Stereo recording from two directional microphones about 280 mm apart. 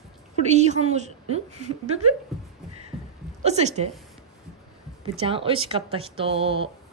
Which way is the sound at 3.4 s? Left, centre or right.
Right.